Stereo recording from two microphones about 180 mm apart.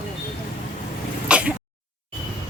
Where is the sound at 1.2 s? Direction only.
5° right (ahead or behind).